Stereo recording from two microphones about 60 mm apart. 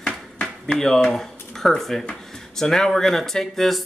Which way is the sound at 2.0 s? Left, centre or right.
Centre.